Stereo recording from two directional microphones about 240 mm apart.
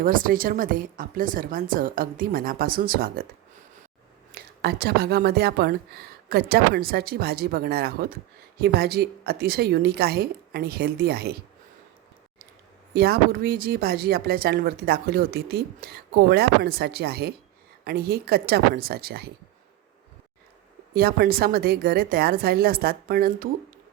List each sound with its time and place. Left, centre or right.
0.0 s speech: right
4.4 s speech: right
12.9 s speech: right
20.9 s speech: right